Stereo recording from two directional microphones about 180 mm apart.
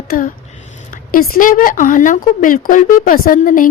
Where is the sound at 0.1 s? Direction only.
50° left (ahead or behind).